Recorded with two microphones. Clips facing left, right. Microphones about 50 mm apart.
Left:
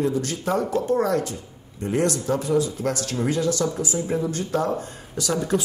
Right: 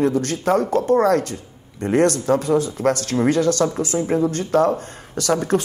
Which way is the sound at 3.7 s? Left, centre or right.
Right.